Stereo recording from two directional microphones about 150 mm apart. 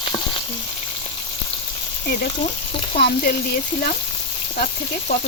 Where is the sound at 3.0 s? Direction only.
90° left.